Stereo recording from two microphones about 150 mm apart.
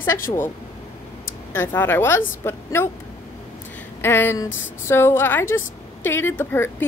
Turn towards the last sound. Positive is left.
turn(degrees=15)  # may be behind; listen again after turning